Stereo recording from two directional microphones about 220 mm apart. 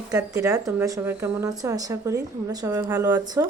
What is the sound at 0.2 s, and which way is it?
Speech, 15° right (ahead or behind).